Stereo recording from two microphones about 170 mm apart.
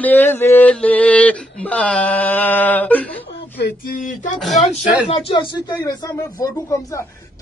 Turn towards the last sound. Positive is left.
turn(degrees=25)  # may be behind; listen again after turning